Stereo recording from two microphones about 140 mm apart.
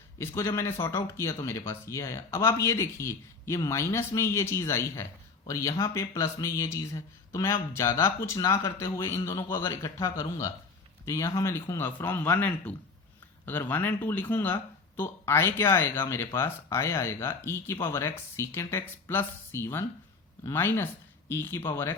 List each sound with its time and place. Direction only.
0.2 s speech: 15° left (ahead or behind)